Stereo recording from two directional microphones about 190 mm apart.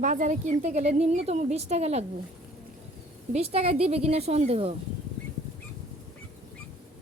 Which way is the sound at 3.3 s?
30° right (ahead or behind).